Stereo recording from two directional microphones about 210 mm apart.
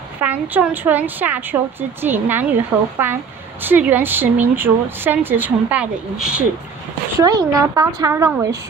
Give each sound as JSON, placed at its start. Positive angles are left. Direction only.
{"t": 0.2, "sound": "speech", "side_deg": -10}
{"t": 7.2, "sound": "speech", "side_deg": -20}